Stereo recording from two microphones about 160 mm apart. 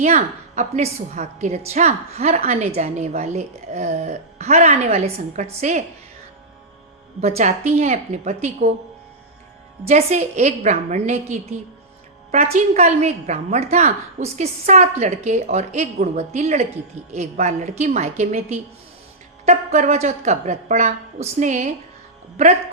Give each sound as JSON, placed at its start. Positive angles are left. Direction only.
{"t": 0.0, "sound": "a woman's voice", "side_deg": -45}
{"t": 7.2, "sound": "a woman's voice", "side_deg": -40}
{"t": 9.8, "sound": "a woman's voice", "side_deg": -45}